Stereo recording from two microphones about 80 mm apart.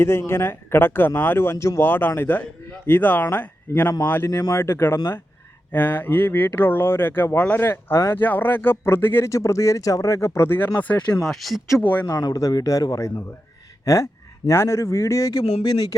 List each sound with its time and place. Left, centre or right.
0.0 s speech: left
4.3 s a man's voice: left
4.5 s speech: left
9.3 s speech: left
10.8 s speech: centre
11.2 s speech: centre
11.8 s speech: centre
12.0 s a man's voice: left
15.3 s speech: left